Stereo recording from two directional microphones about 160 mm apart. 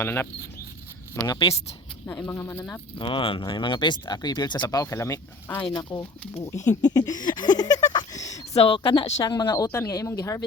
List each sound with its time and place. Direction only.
0.0 s speech: 15° left (ahead or behind)
3.0 s speech: 30° left (ahead or behind); by 5.6 s 15° left (ahead or behind)
5.6 s speech: 30° left (ahead or behind)
6.4 s speech: 20° left (ahead or behind)
7.9 s a sound: 20° left (ahead or behind)
8.5 s speech: 35° left (ahead or behind)